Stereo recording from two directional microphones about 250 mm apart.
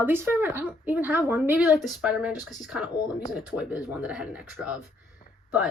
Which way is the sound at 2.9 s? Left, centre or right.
Centre.